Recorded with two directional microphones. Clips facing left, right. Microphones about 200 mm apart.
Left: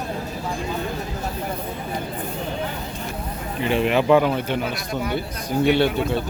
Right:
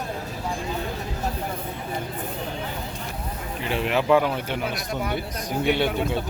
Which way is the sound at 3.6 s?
Centre (ahead or behind).